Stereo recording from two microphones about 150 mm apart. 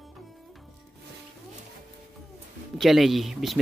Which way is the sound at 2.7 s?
Centre (ahead or behind).